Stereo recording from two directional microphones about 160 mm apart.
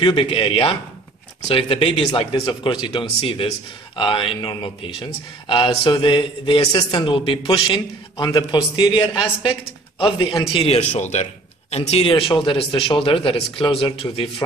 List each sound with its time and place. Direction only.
0.0 s a man's voice: 30° left (ahead or behind)